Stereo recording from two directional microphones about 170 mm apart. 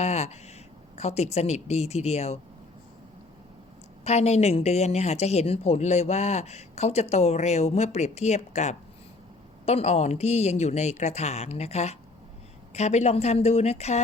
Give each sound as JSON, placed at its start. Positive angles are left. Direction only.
{"t": 0.0, "sound": "a sound", "side_deg": 40}
{"t": 0.9, "sound": "a woman's voice", "side_deg": 40}
{"t": 4.0, "sound": "a woman's voice", "side_deg": 40}